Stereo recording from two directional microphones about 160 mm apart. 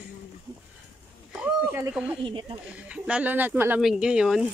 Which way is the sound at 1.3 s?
10° right (ahead or behind).